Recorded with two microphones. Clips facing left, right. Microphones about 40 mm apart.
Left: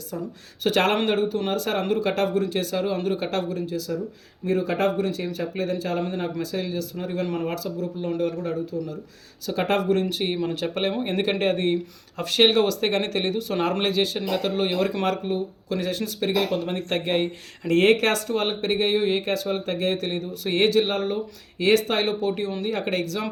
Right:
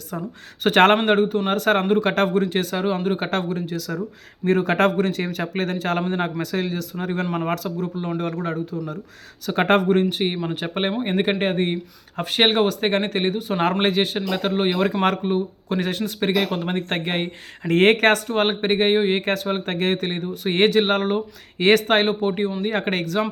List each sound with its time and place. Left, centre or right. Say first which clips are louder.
0.6 s a man's voice: right 6 dB; right
13.7 s speech: right 3 dB; right
19.2 s speech: right 2 dB; right
22.0 s speech: right 3 dB; right
22.6 s speech: right 2 dB; right